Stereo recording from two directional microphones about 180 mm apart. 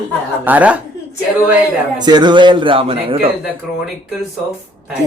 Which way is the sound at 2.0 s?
25° right (ahead or behind).